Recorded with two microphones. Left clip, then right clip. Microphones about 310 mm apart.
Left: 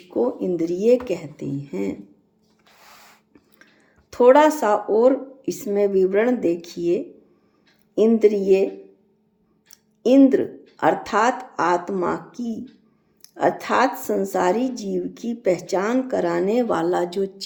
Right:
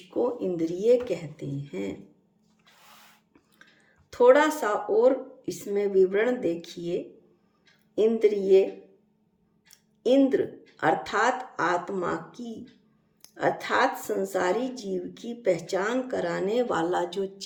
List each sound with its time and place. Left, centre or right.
0.1 s speech: left
0.4 s speech: centre
4.3 s speech: centre
10.0 s speech: centre